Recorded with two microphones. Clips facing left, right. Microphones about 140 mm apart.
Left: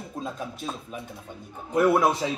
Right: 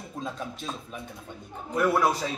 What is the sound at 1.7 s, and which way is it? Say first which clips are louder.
Speech: left 3 dB; 15° left (ahead or behind).